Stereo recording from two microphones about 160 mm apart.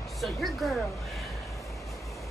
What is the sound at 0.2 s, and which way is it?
Speech, centre (ahead or behind).